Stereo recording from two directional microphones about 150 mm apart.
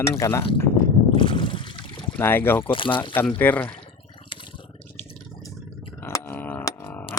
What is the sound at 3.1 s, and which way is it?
Speech, 15° left (ahead or behind).